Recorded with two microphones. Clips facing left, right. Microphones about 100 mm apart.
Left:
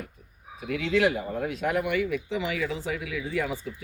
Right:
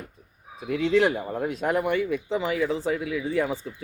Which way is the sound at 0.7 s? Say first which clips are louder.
Right 3 dB; 25° right (ahead or behind).